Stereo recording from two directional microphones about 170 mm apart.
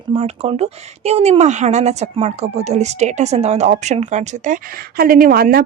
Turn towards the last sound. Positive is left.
turn(degrees=-60)  # may be behind; listen again after turning